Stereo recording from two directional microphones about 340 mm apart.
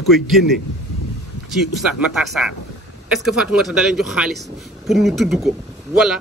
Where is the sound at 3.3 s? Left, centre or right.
Centre.